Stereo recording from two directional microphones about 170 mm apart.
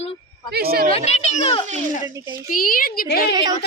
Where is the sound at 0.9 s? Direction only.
40° left (ahead or behind).